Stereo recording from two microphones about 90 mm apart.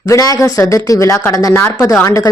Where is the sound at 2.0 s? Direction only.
35° left (ahead or behind).